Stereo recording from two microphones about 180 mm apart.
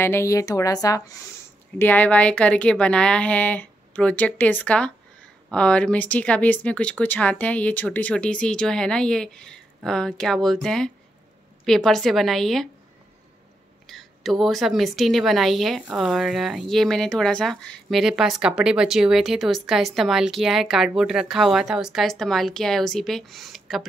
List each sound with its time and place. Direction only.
0.0 s a woman's voice: 15° left (ahead or behind)
13.8 s a woman's voice: centre (ahead or behind)